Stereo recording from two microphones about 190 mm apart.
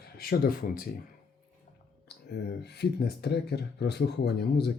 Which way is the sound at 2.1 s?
60° left (ahead or behind).